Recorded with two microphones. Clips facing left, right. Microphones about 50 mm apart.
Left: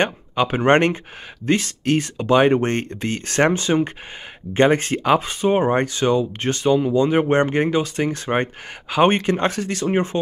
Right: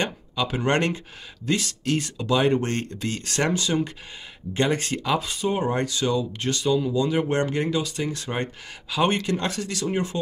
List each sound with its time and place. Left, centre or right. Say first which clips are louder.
0.0 s speech: left 6 dB; left